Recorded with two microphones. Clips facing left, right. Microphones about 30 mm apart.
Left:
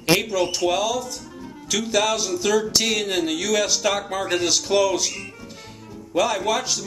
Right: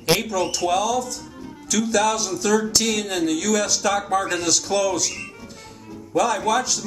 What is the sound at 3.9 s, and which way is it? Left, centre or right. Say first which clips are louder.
Speech: right 4 dB; centre.